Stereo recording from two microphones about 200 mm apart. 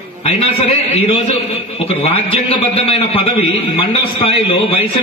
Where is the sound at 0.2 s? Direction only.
30° left (ahead or behind).